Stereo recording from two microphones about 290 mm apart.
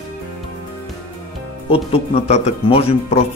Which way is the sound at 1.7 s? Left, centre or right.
Centre.